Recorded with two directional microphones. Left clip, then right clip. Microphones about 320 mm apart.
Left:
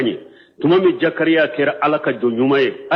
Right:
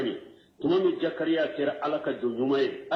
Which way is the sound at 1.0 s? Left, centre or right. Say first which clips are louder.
Left 11 dB; left.